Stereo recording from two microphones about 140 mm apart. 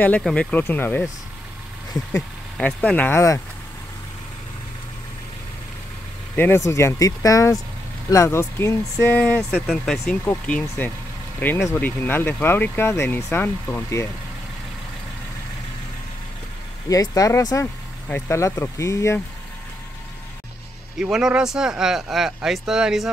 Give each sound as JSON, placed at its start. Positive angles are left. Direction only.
{"t": 0.2, "sound": "speech", "side_deg": 5}
{"t": 2.5, "sound": "speech", "side_deg": 10}
{"t": 6.3, "sound": "speech", "side_deg": 15}
{"t": 9.4, "sound": "speech", "side_deg": 0}
{"t": 16.9, "sound": "speech", "side_deg": 25}
{"t": 21.0, "sound": "speech", "side_deg": -5}